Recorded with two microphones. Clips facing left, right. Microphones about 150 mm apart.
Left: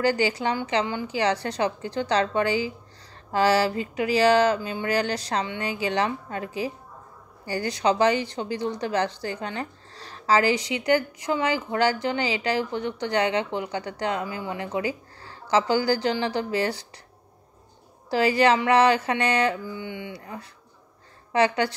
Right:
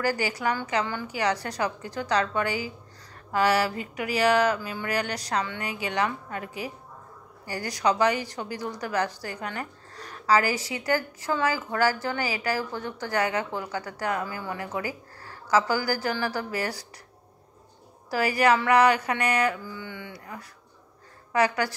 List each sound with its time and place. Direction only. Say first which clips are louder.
0.0 s a woman's voice: left 4 dB; 25° left (ahead or behind)
18.1 s a woman's voice: left 2 dB; 25° left (ahead or behind)